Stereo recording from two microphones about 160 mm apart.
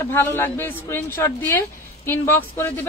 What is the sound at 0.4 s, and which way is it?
Speech, 15° left (ahead or behind).